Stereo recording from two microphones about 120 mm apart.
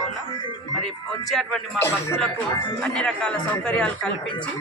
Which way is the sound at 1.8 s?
20° left (ahead or behind).